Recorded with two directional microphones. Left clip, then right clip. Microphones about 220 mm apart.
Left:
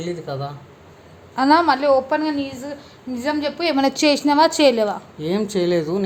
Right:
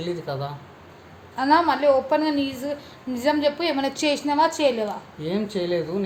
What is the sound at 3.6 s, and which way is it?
A woman's voice, 20° left (ahead or behind).